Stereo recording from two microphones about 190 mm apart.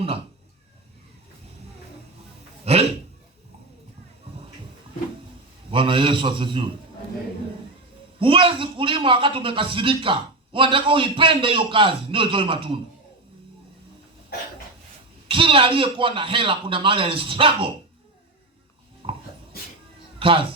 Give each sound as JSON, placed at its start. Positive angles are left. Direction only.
{"t": 2.7, "sound": "speech", "side_deg": -30}
{"t": 5.7, "sound": "a man's voice", "side_deg": -25}
{"t": 8.2, "sound": "a man's voice", "side_deg": -30}
{"t": 15.3, "sound": "a man's voice", "side_deg": -25}
{"t": 19.0, "sound": "a sound", "side_deg": -30}
{"t": 20.1, "sound": "music", "side_deg": -30}